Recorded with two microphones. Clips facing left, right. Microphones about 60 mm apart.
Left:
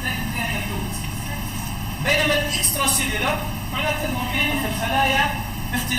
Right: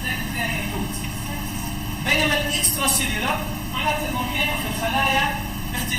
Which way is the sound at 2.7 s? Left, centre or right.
Left.